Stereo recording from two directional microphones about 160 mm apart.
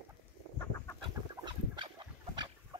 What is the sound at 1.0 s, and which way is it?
Duck, 30° right (ahead or behind).